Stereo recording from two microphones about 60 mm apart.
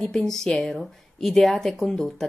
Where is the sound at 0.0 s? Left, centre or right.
Centre.